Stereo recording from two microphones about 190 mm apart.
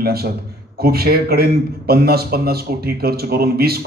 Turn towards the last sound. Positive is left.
turn(degrees=-55)  # may be behind; listen again after turning